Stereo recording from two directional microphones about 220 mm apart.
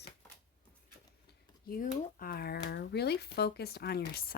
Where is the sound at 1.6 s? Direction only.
40° left (ahead or behind).